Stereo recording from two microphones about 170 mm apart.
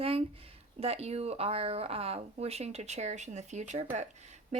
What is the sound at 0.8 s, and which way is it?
A woman's voice, 35° right (ahead or behind).